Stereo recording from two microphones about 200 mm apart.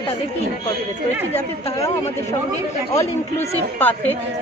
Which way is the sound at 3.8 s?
10° left (ahead or behind).